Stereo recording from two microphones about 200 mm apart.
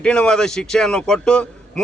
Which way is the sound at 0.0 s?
5° left (ahead or behind).